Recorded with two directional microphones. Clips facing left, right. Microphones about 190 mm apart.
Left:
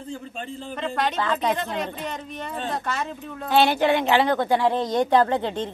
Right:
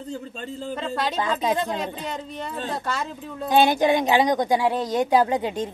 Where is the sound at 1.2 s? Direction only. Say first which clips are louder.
Right 1 dB; 15° right (ahead or behind).